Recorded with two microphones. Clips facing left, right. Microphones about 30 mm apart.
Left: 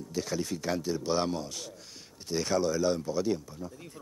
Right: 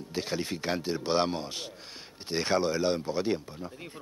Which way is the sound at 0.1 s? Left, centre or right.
Right.